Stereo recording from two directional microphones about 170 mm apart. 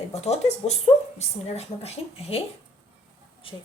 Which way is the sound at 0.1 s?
40° left (ahead or behind).